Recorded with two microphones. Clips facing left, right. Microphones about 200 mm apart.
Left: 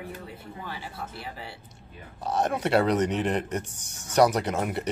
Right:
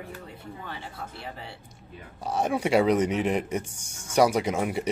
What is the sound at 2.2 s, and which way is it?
A man's voice, 10° right (ahead or behind).